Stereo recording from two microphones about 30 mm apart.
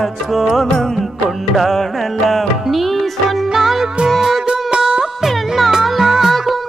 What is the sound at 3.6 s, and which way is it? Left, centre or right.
Music, centre.